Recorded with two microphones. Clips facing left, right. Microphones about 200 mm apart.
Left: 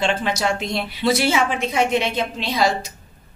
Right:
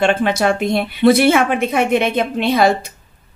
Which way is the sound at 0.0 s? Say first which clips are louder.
Right 6 dB; 55° right (ahead or behind).